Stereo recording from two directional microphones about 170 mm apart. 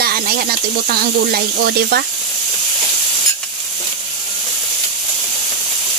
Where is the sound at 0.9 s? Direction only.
65° right (ahead or behind).